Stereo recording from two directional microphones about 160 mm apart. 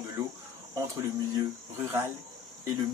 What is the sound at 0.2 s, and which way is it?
Speech, 25° right (ahead or behind).